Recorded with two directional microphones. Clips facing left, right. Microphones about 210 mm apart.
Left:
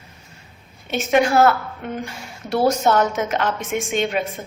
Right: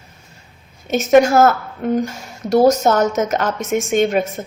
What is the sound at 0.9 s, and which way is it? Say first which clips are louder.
A woman's voice: right 6 dB; 40° right (ahead or behind).